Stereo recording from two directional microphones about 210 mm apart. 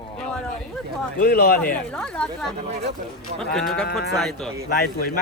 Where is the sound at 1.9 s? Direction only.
5° left (ahead or behind).